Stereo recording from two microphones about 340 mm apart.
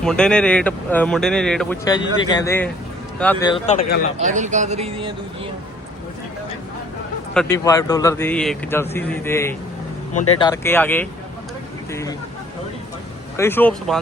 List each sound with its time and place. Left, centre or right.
0.0 s a man's voice: centre
4.2 s a man's voice: right
7.3 s a man's voice: centre
13.3 s speech: centre